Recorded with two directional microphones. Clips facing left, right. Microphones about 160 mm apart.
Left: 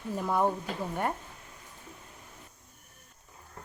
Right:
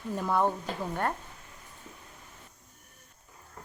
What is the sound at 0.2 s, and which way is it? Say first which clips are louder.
Speech: right 1 dB; 10° left (ahead or behind).